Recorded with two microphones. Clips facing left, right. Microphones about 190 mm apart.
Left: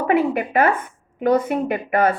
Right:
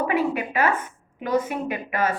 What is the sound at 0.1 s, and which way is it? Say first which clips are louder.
A woman's voice: left 5 dB; 55° left (ahead or behind).